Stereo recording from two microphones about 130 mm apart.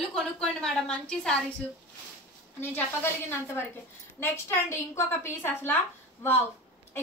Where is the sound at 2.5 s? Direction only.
15° left (ahead or behind).